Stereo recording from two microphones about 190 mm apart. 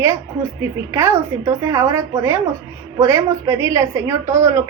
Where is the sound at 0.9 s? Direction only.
15° right (ahead or behind).